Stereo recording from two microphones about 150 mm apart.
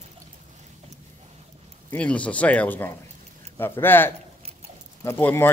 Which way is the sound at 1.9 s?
10° left (ahead or behind).